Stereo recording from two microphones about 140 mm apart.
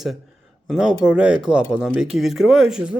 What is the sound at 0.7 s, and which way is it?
Speech, 5° right (ahead or behind).